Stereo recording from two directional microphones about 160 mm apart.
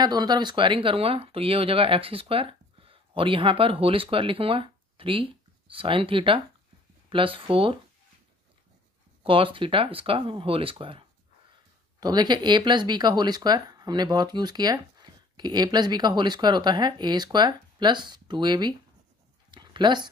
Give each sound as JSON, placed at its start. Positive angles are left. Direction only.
{"t": 0.0, "sound": "speech", "side_deg": -25}
{"t": 9.2, "sound": "speech", "side_deg": -35}
{"t": 19.5, "sound": "a sound", "side_deg": -30}